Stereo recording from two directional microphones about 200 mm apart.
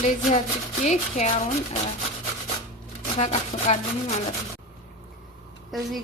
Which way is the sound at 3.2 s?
35° left (ahead or behind).